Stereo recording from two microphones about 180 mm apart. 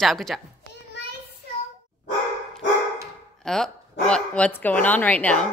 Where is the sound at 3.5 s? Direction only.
5° left (ahead or behind).